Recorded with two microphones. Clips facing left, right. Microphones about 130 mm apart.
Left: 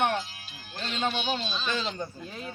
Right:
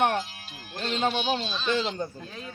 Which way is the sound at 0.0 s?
50° right (ahead or behind).